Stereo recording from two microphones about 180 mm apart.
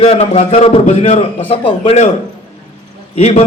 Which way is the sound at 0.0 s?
35° left (ahead or behind).